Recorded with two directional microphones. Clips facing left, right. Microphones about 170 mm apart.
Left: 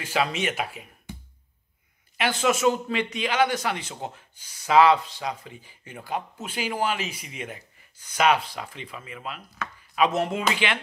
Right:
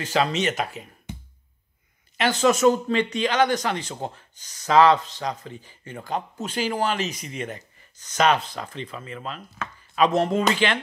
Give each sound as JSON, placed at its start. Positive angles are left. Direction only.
{"t": 0.0, "sound": "speech", "side_deg": 10}
{"t": 1.1, "sound": "music", "side_deg": -20}
{"t": 2.1, "sound": "speech", "side_deg": 10}